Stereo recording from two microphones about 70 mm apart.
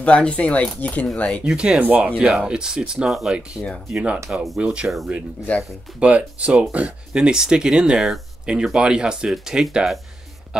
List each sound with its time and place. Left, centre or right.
0.0 s speech: centre
1.4 s speech: centre
1.8 s speech: right
3.1 s speech: centre
3.9 s speech: centre
4.8 s speech: centre
5.9 s speech: centre